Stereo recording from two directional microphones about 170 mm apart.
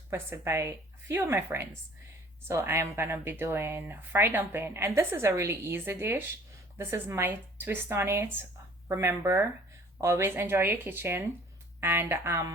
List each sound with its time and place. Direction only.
0.1 s speech: 15° right (ahead or behind)